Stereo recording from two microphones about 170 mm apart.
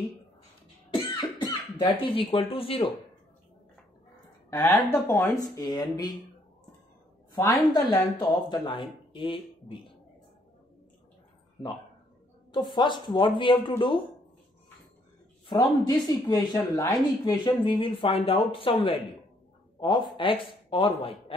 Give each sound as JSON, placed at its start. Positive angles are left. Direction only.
{"t": 0.9, "sound": "cough", "side_deg": 30}
{"t": 4.5, "sound": "speech", "side_deg": 15}
{"t": 7.3, "sound": "speech", "side_deg": 20}
{"t": 12.5, "sound": "speech", "side_deg": 25}
{"t": 15.4, "sound": "a man's voice", "side_deg": 25}